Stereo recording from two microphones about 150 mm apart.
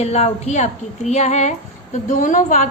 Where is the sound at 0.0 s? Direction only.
45° left (ahead or behind).